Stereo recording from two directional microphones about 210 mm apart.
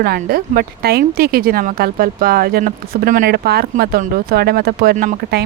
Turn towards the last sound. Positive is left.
turn(degrees=-45)  # may be behind; listen again after turning